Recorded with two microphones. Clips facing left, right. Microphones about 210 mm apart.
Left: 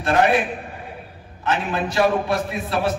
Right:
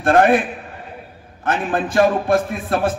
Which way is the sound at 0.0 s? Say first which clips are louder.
Right 4 dB; 50° right (ahead or behind).